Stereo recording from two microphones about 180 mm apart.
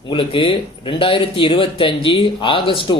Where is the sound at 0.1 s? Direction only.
30° left (ahead or behind).